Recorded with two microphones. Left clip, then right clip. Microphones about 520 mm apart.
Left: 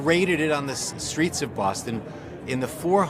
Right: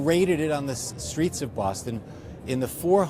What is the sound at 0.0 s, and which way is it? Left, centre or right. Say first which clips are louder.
Speech: left 1 dB; right.